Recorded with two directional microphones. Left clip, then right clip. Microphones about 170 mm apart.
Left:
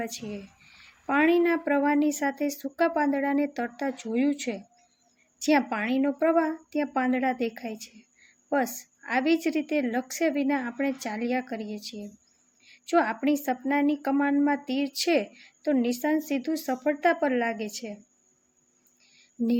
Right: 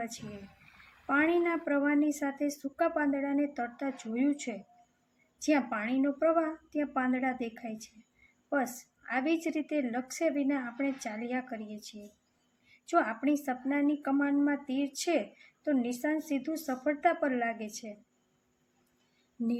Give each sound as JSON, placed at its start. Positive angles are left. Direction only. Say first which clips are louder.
{"t": 0.6, "sound": "a sound", "louder": "left 4 dB", "side_deg": 0}
{"t": 1.0, "sound": "speech", "louder": "left 5 dB", "side_deg": 45}
{"t": 9.0, "sound": "speech", "louder": "left 6 dB", "side_deg": 45}